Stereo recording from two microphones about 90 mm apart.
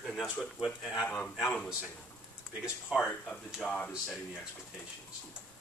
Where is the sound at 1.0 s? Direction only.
15° left (ahead or behind).